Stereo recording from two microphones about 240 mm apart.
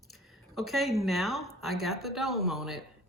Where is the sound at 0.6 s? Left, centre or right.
Centre.